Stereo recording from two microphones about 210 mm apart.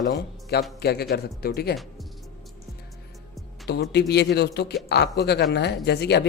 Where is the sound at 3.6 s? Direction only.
50° left (ahead or behind).